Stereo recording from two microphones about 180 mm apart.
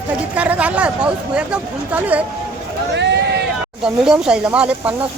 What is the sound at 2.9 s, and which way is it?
Speech, 75° right (ahead or behind).